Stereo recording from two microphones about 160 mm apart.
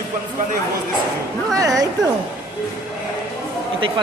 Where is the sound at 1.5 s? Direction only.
20° right (ahead or behind).